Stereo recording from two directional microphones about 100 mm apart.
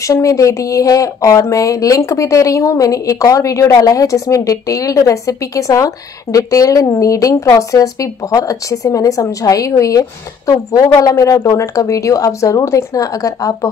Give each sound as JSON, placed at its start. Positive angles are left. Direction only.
{"t": 0.0, "sound": "speech", "side_deg": 35}